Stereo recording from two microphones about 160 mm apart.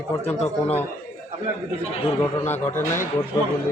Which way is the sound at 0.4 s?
10° left (ahead or behind).